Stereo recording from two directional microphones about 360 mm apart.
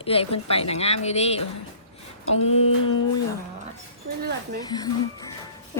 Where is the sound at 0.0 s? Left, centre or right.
Centre.